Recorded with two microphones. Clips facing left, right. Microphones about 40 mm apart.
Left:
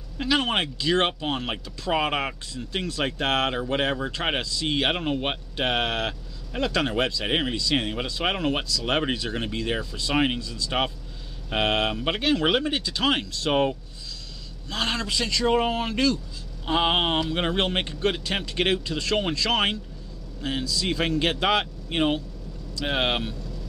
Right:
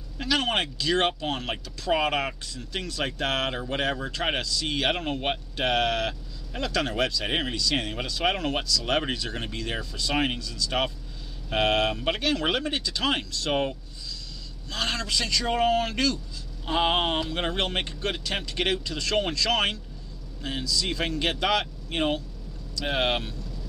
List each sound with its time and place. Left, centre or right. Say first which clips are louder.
0.2 s speech: left 2 dB; centre
7.2 s speech: left 3 dB; centre
7.5 s speech: left 2 dB; left
10.4 s speech: left 1 dB; left